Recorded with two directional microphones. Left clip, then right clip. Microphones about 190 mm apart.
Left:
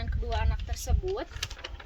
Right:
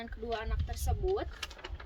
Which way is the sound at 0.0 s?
10° left (ahead or behind).